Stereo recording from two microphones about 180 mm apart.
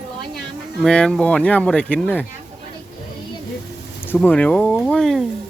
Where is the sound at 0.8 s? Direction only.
5° left (ahead or behind).